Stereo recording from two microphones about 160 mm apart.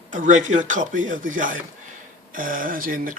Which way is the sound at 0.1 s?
55° right (ahead or behind).